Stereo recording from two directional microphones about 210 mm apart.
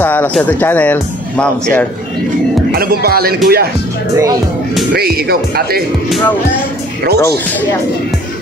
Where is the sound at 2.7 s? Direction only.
45° right (ahead or behind).